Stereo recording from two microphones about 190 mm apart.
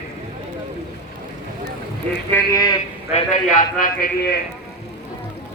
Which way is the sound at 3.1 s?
40° left (ahead or behind).